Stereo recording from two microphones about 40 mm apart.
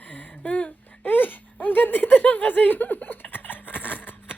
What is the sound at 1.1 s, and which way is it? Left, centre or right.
Speech, left.